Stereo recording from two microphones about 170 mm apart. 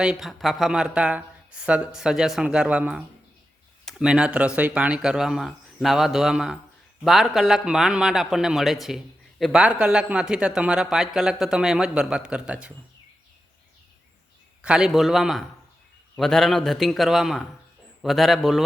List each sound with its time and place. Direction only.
0.0 s speech: 5° right (ahead or behind)
14.6 s speech: 5° right (ahead or behind)